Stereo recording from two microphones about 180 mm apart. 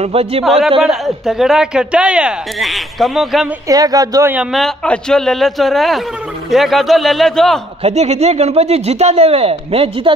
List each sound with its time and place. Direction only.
0.0 s speech: 35° right (ahead or behind)
0.8 s speech: centre (ahead or behind)
3.6 s speech: 20° right (ahead or behind); by 7.6 s centre (ahead or behind)
7.8 s speech: 35° right (ahead or behind)